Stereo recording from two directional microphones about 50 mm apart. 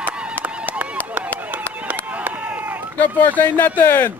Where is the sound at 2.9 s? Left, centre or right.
Left.